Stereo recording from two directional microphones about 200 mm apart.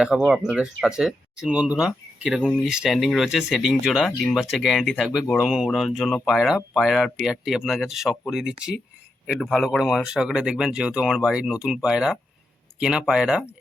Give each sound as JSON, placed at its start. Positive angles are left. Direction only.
{"t": 0.3, "sound": "speech", "side_deg": -5}